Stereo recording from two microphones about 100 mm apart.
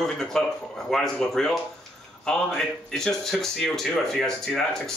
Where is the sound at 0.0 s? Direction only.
5° left (ahead or behind).